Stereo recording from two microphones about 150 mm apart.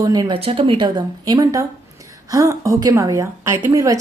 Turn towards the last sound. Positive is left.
turn(degrees=-20)  # may be behind; listen again after turning